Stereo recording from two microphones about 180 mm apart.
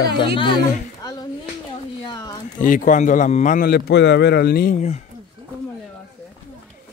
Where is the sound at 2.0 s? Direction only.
20° left (ahead or behind).